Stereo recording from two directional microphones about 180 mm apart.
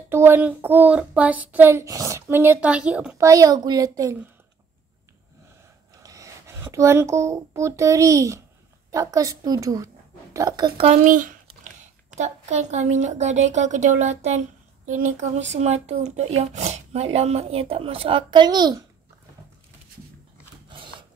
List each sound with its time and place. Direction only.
0.1 s child singing: 10° right (ahead or behind)
3.2 s a woman's voice: 20° right (ahead or behind)
6.0 s a child's voice: 20° right (ahead or behind)
10.9 s speech: 45° right (ahead or behind); by 18.9 s 25° right (ahead or behind)